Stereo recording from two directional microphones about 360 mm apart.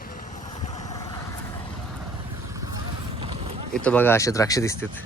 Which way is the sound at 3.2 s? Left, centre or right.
Centre.